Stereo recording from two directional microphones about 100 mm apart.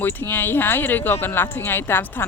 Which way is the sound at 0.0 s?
20° left (ahead or behind).